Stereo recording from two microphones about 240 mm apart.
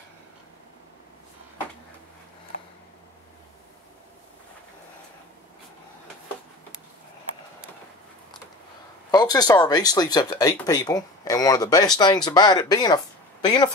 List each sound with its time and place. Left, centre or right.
9.1 s speech: centre